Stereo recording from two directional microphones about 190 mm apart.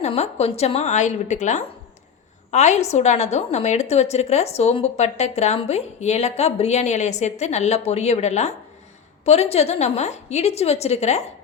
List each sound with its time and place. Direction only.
0.0 s a woman's voice: 35° left (ahead or behind)